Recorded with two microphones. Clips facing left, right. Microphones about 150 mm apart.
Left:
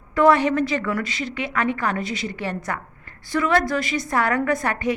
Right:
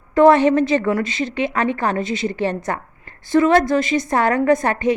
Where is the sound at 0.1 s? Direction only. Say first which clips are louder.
Right 5 dB; 25° right (ahead or behind).